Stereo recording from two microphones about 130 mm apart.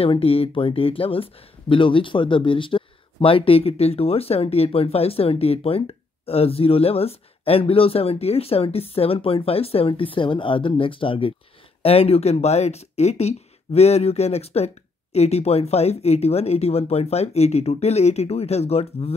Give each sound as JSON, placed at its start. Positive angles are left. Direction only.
{"t": 0.0, "sound": "speech", "side_deg": 45}